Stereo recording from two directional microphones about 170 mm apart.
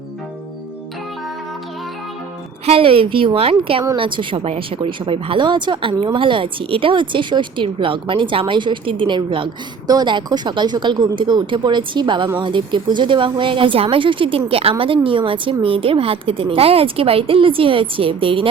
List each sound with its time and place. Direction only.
2.6 s speech: 35° right (ahead or behind)